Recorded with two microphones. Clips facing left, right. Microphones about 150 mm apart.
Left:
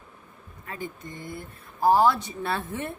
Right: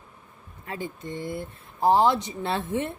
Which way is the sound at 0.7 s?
25° right (ahead or behind).